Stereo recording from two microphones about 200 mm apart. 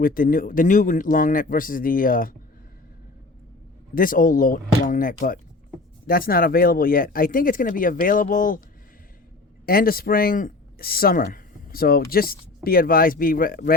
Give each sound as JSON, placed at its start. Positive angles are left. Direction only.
{"t": 0.0, "sound": "speech", "side_deg": 45}
{"t": 3.9, "sound": "speech", "side_deg": 45}
{"t": 9.6, "sound": "speech", "side_deg": 45}